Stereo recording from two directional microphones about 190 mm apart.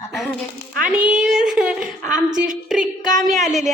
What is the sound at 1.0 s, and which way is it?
Child singing, 5° right (ahead or behind).